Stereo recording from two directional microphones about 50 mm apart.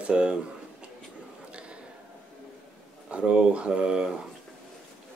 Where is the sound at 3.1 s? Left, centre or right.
Right.